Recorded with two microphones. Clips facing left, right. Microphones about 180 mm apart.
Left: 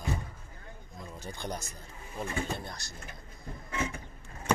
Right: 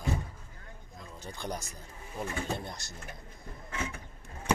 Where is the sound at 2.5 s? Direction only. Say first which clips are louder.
Right 2 dB; 20° right (ahead or behind).